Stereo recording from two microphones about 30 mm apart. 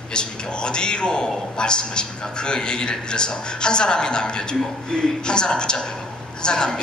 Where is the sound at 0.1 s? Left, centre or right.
Left.